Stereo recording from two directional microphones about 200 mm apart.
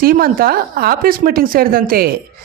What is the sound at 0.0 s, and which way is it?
A woman's voice, 45° right (ahead or behind).